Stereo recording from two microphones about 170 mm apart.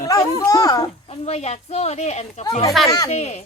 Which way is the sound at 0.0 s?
20° left (ahead or behind).